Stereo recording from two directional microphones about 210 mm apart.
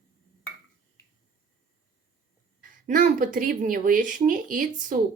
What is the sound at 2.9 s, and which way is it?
Speech, 40° right (ahead or behind).